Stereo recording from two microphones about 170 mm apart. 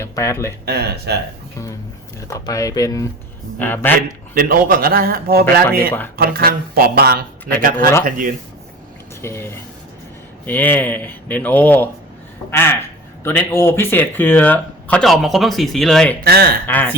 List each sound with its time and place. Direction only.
0.0 s speech: 15° left (ahead or behind)
0.6 s speech: 70° right (ahead or behind)
2.2 s speech: 20° left (ahead or behind)
4.4 s speech: 60° right (ahead or behind)
9.2 s speech: 15° left (ahead or behind)
16.2 s speech: 65° right (ahead or behind)
16.6 s speech: 10° left (ahead or behind)